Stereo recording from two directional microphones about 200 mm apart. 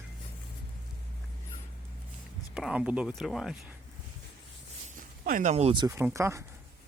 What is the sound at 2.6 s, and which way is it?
Speech, 5° right (ahead or behind).